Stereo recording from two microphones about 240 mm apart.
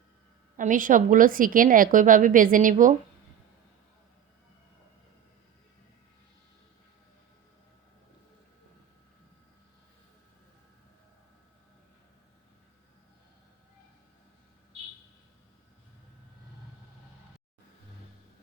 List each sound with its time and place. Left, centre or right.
0.5 s a woman's voice: right